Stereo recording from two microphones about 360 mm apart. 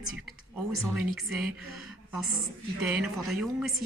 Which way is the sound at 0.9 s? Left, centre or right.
Centre.